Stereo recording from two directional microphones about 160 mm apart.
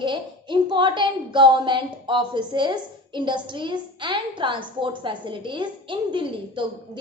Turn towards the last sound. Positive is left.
turn(degrees=-30)  # may be behind; listen again after turning